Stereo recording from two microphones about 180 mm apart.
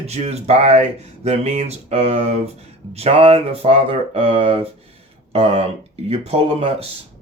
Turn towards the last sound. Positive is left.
turn(degrees=-35)  # may be behind; listen again after turning